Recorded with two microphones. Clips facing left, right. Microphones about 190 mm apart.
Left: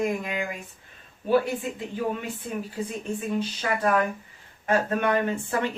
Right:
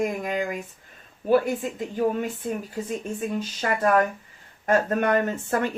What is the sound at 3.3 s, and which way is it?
Speech, 45° right (ahead or behind).